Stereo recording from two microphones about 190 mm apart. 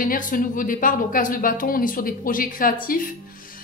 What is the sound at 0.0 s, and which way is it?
Speech, 45° left (ahead or behind).